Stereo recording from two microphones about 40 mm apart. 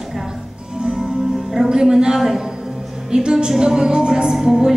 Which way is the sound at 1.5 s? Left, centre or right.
Centre.